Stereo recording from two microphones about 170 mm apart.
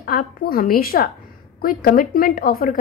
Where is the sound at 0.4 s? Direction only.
60° left (ahead or behind).